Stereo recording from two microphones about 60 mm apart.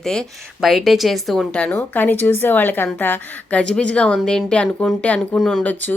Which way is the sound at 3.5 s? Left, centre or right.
Centre.